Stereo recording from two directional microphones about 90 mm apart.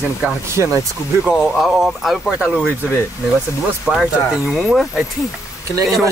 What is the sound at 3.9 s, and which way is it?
Speech, 10° right (ahead or behind).